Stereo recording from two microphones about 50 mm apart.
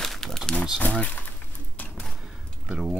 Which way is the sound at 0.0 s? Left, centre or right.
Centre.